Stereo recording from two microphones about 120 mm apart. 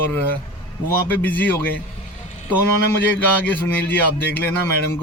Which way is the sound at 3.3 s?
15° left (ahead or behind).